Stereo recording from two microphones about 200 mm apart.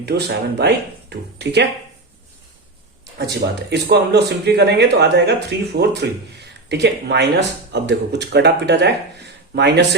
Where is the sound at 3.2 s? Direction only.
55° right (ahead or behind).